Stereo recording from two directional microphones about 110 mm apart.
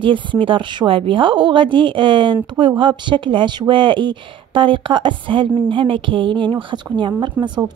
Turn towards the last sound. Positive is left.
turn(degrees=-40)  # may be behind; listen again after turning